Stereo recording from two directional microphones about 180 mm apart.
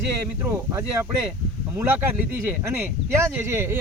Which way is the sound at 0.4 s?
15° right (ahead or behind).